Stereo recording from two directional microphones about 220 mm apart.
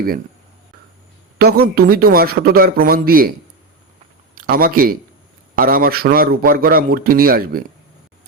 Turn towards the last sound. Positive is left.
turn(degrees=-40)  # may be behind; listen again after turning